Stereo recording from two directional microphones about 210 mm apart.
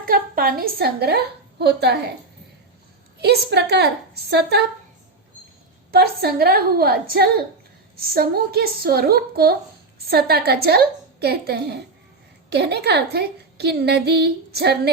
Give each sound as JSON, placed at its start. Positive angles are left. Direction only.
{"t": 0.0, "sound": "a woman's voice", "side_deg": -45}
{"t": 3.2, "sound": "a woman's voice", "side_deg": -50}
{"t": 5.9, "sound": "a woman's voice", "side_deg": -50}